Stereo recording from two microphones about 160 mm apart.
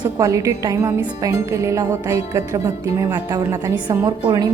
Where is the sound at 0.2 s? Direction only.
20° right (ahead or behind).